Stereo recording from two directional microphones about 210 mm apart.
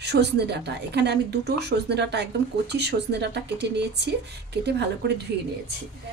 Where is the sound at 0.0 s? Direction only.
55° right (ahead or behind).